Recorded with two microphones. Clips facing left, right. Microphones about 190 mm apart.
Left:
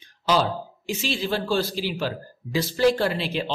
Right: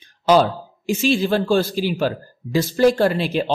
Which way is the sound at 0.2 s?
50° right (ahead or behind).